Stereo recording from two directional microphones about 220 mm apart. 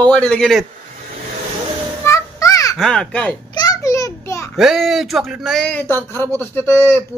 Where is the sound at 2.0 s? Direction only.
15° left (ahead or behind).